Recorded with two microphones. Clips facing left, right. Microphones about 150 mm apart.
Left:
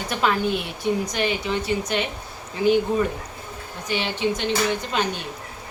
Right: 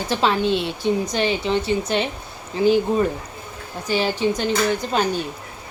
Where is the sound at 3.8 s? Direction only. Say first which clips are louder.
Right 4 dB; 35° right (ahead or behind).